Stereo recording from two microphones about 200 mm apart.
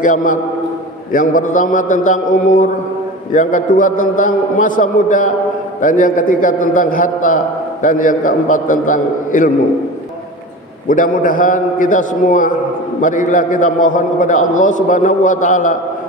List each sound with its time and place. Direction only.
0.0 s a man's voice: 40° left (ahead or behind)
10.9 s a man's voice: 40° left (ahead or behind)